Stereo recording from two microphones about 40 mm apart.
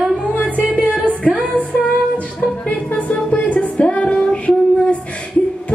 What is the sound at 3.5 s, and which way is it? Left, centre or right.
Music, left.